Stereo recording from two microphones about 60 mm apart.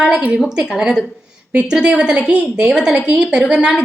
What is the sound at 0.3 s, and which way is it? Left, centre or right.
A woman's voice, centre.